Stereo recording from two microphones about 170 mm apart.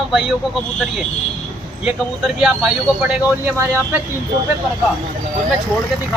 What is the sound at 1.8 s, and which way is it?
A man's voice, 5° right (ahead or behind).